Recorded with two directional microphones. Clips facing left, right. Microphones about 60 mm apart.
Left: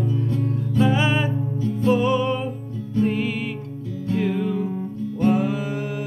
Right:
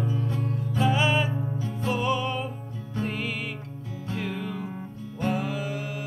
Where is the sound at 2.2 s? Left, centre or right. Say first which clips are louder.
Left 6 dB; centre; by 5.8 s left.